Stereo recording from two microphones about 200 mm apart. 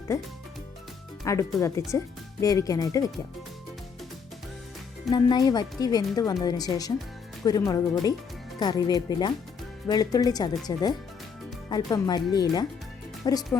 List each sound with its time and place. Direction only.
1.2 s speech: 15° left (ahead or behind)
5.1 s speech: 20° left (ahead or behind)